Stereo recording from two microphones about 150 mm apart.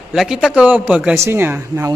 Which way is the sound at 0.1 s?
Centre (ahead or behind).